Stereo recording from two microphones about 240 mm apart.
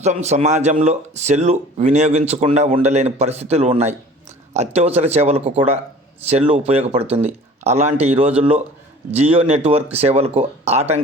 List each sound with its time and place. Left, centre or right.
0.0 s speech: right